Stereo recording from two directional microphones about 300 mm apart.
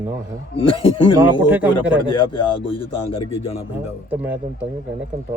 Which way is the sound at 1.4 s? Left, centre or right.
Centre.